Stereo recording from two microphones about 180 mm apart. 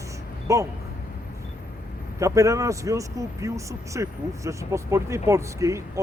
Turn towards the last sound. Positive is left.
turn(degrees=-15)  # may be behind; listen again after turning